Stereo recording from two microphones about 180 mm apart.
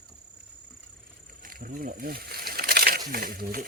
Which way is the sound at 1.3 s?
55° right (ahead or behind).